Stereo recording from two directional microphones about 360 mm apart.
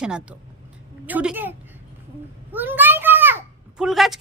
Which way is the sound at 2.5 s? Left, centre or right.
Centre.